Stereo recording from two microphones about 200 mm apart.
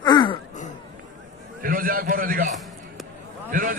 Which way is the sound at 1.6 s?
45° right (ahead or behind).